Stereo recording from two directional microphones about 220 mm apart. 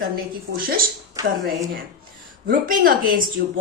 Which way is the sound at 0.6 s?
40° right (ahead or behind).